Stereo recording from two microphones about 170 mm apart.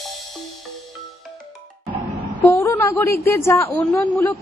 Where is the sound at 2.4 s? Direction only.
15° left (ahead or behind).